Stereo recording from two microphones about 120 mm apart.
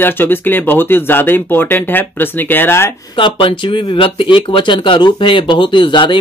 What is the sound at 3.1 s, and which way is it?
Speech, 45° left (ahead or behind).